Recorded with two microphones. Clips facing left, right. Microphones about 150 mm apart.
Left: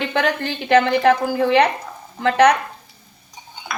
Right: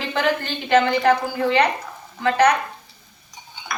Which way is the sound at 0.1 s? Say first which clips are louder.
Left 1 dB; 70° left (ahead or behind).